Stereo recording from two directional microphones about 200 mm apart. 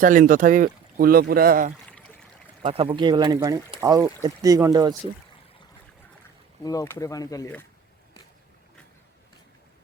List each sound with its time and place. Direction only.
0.0 s speech: 40° right (ahead or behind)
1.9 s a sound: 5° left (ahead or behind)
2.6 s speech: 30° right (ahead or behind)
6.7 s speech: 15° left (ahead or behind)